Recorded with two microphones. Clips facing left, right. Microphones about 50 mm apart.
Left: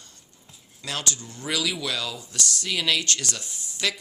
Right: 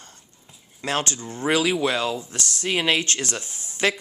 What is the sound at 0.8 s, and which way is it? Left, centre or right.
Speech, right.